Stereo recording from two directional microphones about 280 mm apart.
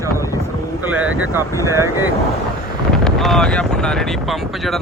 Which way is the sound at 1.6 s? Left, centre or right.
Centre.